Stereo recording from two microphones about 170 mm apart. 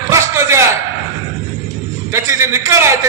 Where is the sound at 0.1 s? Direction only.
15° right (ahead or behind).